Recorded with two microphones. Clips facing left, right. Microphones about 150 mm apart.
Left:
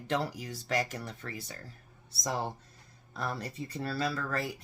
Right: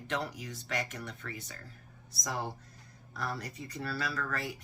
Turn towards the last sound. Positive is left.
turn(degrees=30)  # may be behind; listen again after turning